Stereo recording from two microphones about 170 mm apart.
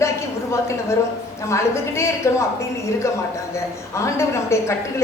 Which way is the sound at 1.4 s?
15° left (ahead or behind).